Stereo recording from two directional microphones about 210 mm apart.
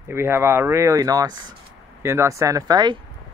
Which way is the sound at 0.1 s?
10° right (ahead or behind).